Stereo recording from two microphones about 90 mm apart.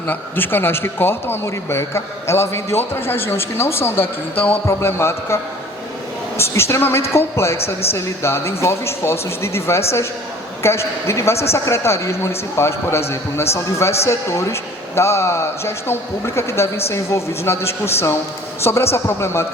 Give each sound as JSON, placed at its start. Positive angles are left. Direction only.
{"t": 0.1, "sound": "a man's voice", "side_deg": 25}